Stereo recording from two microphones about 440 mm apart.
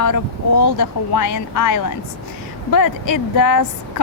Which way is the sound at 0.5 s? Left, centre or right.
Left.